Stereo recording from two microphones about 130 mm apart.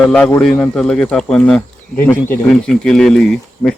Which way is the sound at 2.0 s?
15° left (ahead or behind).